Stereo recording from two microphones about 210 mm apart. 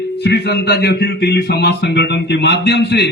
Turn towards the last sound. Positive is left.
turn(degrees=55)  # may be behind; listen again after turning